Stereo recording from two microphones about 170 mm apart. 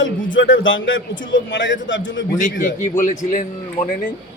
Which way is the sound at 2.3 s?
50° left (ahead or behind).